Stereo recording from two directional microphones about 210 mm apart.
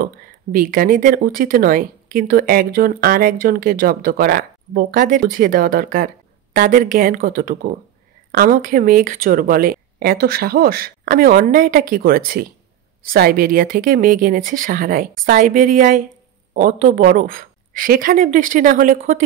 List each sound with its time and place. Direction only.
0.0 s speech: 40° right (ahead or behind)